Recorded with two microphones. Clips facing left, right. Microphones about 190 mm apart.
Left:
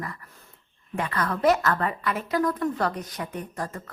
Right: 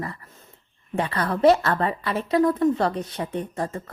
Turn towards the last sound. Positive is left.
turn(degrees=-25)  # may be behind; listen again after turning